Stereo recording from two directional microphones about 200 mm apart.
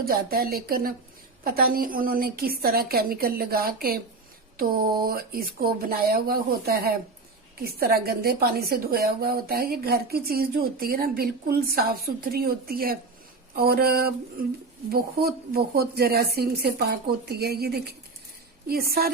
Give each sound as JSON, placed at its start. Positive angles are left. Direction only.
{"t": 0.0, "sound": "a woman's voice", "side_deg": -50}
{"t": 5.0, "sound": "a woman's voice", "side_deg": -50}